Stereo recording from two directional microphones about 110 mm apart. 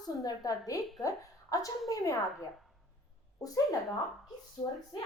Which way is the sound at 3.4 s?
30° left (ahead or behind).